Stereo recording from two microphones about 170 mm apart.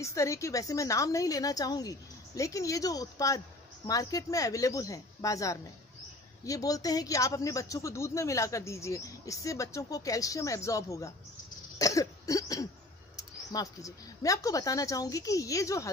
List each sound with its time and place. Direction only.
0.0 s a woman's voice: 20° left (ahead or behind)
11.8 s cough: 20° left (ahead or behind)
13.1 s a woman's voice: 20° left (ahead or behind)